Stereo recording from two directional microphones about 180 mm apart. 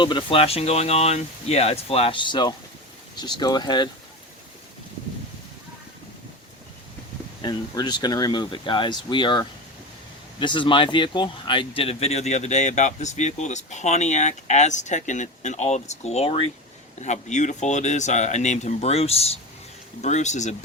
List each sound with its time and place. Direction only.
0.0 s speech: 25° left (ahead or behind)
7.4 s speech: 25° left (ahead or behind); by 20.6 s 40° left (ahead or behind)